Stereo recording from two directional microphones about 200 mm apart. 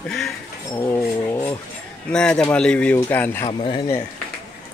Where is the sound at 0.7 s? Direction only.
10° left (ahead or behind).